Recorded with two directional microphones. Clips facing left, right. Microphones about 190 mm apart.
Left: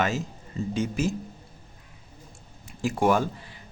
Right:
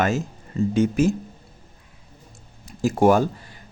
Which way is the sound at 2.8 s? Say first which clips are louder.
Right 6 dB; 45° right (ahead or behind).